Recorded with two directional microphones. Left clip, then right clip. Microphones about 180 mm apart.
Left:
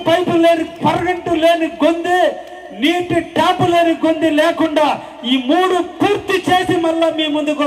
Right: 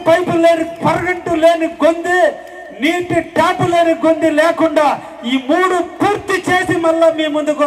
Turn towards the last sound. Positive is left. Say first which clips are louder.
# right 2 dB
turn(degrees=15)  # may be behind; listen again after turning